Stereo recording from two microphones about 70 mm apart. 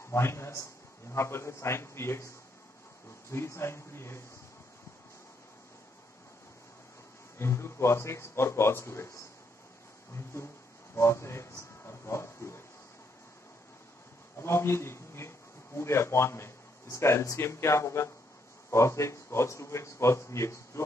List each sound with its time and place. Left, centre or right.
0.1 s a man's voice: left
7.3 s a man's voice: left
10.1 s a man's voice: left
14.4 s speech: left